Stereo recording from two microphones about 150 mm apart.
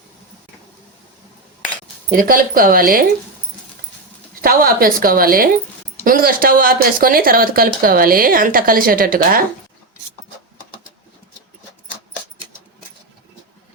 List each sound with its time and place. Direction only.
2.1 s speech: 70° right (ahead or behind)
4.4 s speech: 75° right (ahead or behind)